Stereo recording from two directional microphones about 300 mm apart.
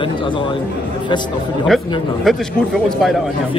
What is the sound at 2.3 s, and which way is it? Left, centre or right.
Speech, centre.